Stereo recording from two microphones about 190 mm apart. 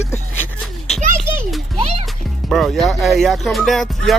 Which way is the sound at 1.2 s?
Centre (ahead or behind).